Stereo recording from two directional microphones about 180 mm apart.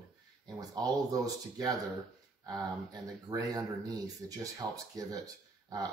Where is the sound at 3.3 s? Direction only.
20° right (ahead or behind).